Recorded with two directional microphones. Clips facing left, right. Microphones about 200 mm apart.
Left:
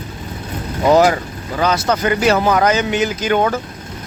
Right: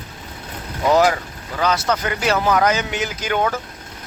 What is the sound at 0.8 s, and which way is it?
Speech, 30° left (ahead or behind).